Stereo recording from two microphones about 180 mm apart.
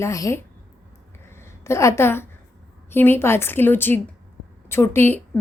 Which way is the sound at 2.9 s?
10° left (ahead or behind).